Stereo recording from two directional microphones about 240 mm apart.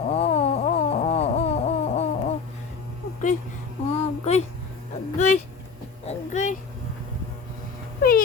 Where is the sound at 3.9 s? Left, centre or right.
Left.